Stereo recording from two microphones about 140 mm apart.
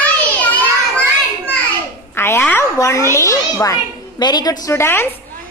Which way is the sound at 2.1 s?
15° left (ahead or behind).